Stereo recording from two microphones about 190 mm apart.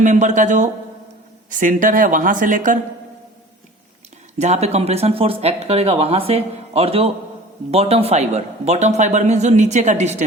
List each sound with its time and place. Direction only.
0.0 s speech: 40° right (ahead or behind)
4.4 s speech: 35° right (ahead or behind)